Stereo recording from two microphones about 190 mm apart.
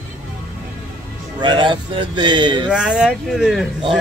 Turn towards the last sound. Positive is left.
turn(degrees=0)  # may be behind; listen again after turning